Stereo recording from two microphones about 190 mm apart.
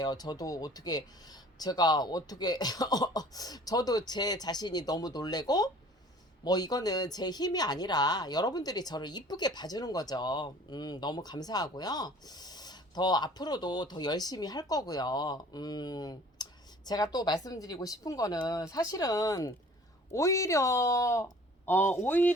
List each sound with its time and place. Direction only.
0.0 s speech: 20° left (ahead or behind)